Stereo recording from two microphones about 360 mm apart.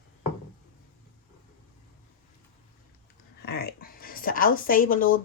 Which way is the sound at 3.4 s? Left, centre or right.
Left.